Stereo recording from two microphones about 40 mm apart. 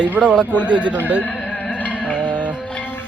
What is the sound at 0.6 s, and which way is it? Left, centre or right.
Speech, right.